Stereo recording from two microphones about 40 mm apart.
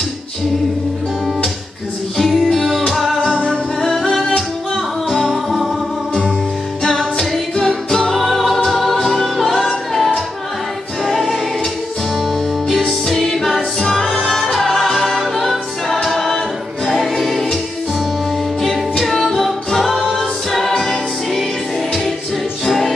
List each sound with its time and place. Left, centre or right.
2.2 s music: centre
5.3 s music: centre
6.8 s music: centre
11.1 s choir: centre
12.2 s music: centre
18.9 s music: centre
20.2 s choir: centre
20.7 s music: centre
22.7 s music: centre